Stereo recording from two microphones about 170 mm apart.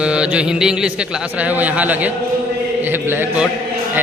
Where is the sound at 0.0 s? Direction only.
5° right (ahead or behind).